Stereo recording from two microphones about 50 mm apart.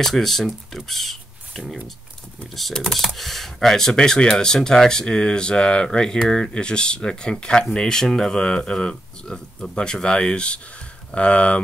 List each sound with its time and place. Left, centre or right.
0.0 s speech: centre
2.5 s speech: centre; by 11.6 s left